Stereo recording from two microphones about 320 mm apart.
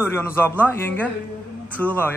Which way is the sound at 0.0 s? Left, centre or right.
Centre.